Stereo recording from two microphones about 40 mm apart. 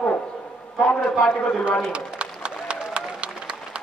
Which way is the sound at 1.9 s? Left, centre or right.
Right.